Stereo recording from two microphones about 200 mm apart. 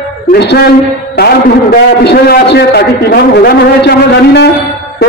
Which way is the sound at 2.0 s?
55° left (ahead or behind).